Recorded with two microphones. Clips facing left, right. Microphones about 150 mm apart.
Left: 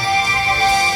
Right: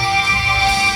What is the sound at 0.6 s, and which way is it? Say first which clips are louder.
Music: left 2 dB; 45° left (ahead or behind).